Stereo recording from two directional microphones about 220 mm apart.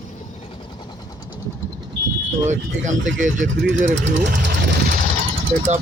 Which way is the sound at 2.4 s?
35° right (ahead or behind).